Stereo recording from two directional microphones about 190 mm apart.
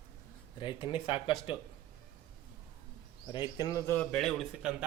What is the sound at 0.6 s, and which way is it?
Speech, 25° left (ahead or behind).